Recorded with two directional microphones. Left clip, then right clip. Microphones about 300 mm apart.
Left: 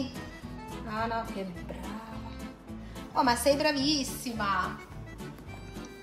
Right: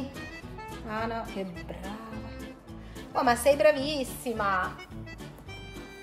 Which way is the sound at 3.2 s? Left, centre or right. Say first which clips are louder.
Right 2 dB; right.